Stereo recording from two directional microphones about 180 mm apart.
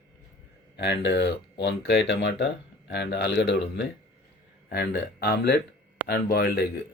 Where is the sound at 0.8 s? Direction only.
70° left (ahead or behind).